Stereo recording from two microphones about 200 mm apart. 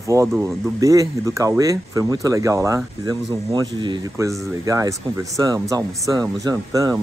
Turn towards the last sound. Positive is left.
turn(degrees=-15)  # may be behind; listen again after turning